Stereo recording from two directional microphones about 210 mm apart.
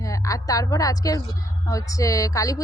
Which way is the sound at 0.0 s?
15° left (ahead or behind).